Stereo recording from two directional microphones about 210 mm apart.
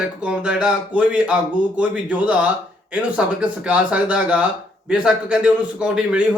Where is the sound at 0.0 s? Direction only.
5° right (ahead or behind).